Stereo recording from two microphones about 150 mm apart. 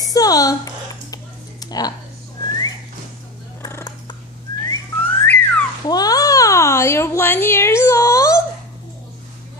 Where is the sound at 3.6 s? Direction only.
25° left (ahead or behind).